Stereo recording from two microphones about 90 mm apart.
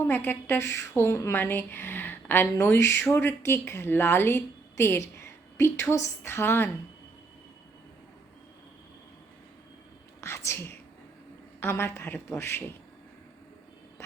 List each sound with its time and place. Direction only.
0.0 s a woman's voice: 25° left (ahead or behind)
10.2 s a woman's voice: 30° left (ahead or behind)